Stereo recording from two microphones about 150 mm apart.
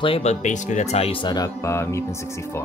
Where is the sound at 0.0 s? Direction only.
40° left (ahead or behind).